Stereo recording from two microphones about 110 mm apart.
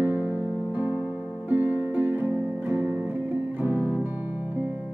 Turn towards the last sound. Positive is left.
turn(degrees=-15)  # may be behind; listen again after turning